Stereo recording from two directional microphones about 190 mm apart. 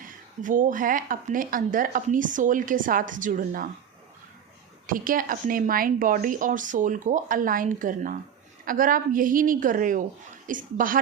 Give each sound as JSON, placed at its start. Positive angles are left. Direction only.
{"t": 0.0, "sound": "speech", "side_deg": -45}
{"t": 4.9, "sound": "speech", "side_deg": -45}